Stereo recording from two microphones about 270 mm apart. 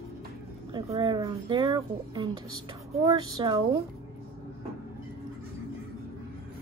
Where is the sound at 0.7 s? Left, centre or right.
Centre.